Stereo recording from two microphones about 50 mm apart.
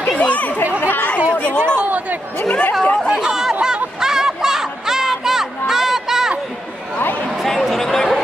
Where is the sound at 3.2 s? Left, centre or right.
Centre.